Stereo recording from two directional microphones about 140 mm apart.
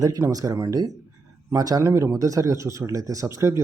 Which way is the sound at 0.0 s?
25° right (ahead or behind).